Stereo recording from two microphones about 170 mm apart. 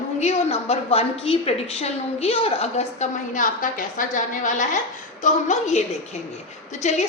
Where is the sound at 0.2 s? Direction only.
40° left (ahead or behind).